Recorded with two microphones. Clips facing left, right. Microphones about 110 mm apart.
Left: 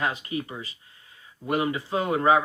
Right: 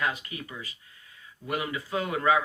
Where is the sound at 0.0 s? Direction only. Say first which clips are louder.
Left 3 dB; 30° left (ahead or behind).